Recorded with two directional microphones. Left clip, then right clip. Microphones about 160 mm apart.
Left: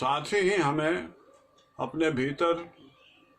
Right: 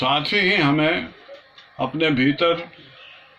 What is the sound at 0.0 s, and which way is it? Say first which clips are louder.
Speech: right 7 dB; 30° left (ahead or behind).